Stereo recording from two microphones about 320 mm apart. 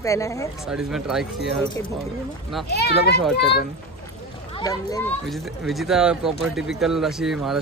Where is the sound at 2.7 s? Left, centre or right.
Left.